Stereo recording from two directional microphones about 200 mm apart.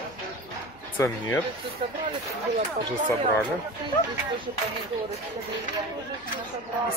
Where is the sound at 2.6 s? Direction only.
40° right (ahead or behind).